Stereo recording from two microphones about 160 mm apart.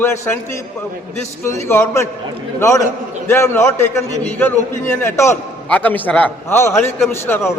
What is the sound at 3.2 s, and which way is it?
A man's voice, 15° left (ahead or behind).